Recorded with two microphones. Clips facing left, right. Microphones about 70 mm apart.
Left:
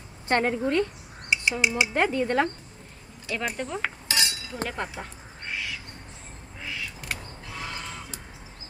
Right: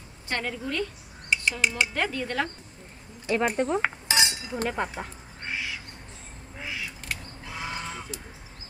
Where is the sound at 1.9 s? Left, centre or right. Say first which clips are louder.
Left 5 dB; left.